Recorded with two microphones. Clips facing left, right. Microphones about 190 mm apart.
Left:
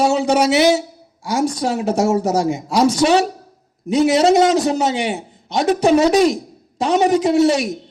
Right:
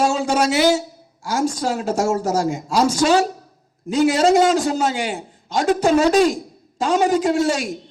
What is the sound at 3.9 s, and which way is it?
A man's voice, 20° left (ahead or behind).